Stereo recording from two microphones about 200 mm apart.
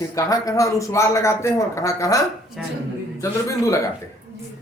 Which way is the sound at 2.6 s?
Centre (ahead or behind).